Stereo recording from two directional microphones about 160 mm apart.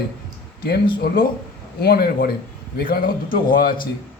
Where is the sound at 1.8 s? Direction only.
75° left (ahead or behind).